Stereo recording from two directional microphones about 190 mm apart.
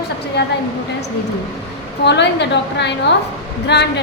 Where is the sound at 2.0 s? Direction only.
65° left (ahead or behind).